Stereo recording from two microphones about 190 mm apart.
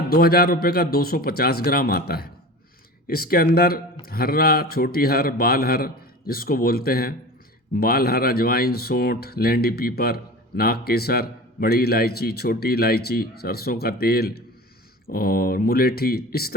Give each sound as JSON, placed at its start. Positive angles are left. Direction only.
{"t": 0.1, "sound": "speech", "side_deg": 50}